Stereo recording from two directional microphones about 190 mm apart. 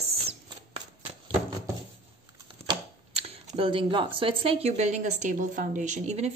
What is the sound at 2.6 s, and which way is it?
Speech, 30° right (ahead or behind).